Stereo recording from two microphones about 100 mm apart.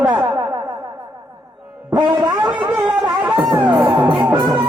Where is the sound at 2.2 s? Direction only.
50° right (ahead or behind).